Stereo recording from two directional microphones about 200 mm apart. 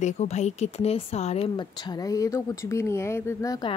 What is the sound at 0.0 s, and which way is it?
Speech, 35° left (ahead or behind).